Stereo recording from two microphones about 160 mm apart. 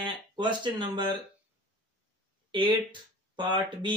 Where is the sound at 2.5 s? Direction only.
30° right (ahead or behind).